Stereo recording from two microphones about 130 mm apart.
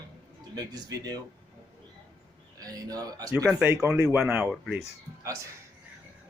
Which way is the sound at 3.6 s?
20° right (ahead or behind).